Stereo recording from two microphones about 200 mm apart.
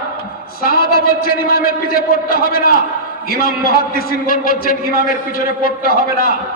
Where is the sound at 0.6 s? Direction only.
50° left (ahead or behind).